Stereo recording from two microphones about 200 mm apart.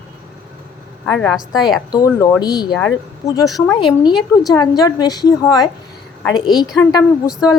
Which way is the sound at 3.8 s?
20° left (ahead or behind).